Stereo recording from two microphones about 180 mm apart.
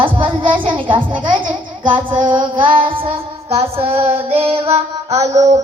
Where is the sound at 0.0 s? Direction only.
30° right (ahead or behind).